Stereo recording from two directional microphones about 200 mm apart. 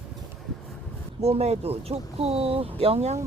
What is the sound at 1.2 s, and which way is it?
Speech, 30° right (ahead or behind).